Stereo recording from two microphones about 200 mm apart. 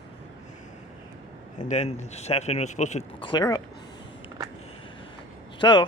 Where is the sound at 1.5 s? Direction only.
35° left (ahead or behind).